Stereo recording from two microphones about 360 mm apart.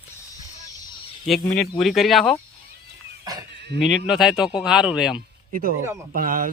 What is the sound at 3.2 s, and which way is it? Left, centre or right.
Speech, centre.